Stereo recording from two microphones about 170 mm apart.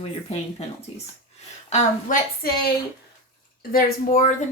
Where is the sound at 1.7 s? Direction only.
55° left (ahead or behind).